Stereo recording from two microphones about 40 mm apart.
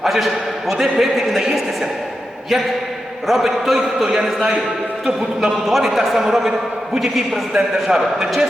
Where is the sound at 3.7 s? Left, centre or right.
Centre.